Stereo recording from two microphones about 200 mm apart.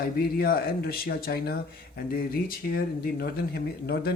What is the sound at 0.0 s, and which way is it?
Speech, 50° left (ahead or behind).